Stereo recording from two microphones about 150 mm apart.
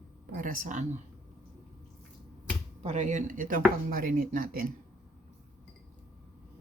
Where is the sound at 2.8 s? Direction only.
55° right (ahead or behind); by 4.7 s 70° right (ahead or behind).